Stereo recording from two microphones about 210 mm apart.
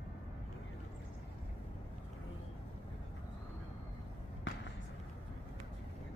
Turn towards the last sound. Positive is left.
turn(degrees=60)  # may be behind; listen again after turning